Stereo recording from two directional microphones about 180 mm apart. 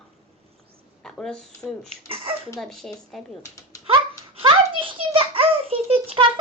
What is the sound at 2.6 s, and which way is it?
Speech, centre (ahead or behind).